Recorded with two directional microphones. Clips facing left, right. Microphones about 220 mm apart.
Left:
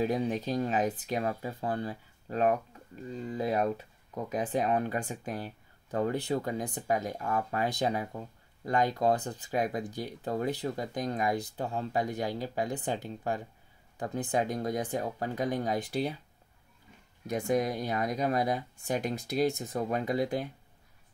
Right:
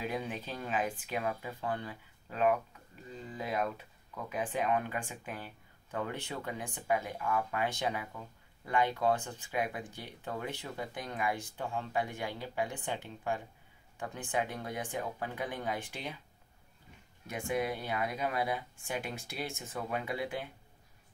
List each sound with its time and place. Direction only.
0.0 s speech: 35° left (ahead or behind)
17.3 s speech: 40° left (ahead or behind)